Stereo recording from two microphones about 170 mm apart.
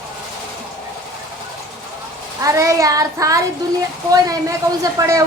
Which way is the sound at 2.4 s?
20° right (ahead or behind).